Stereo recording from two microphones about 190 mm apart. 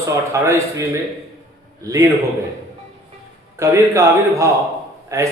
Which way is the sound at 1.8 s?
15° right (ahead or behind).